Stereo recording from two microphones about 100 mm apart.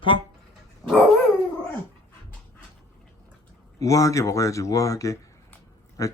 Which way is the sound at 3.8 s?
35° left (ahead or behind).